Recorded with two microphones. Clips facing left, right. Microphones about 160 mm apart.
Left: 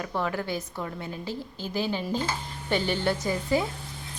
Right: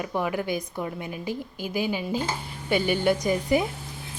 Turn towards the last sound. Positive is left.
turn(degrees=-15)  # may be behind; listen again after turning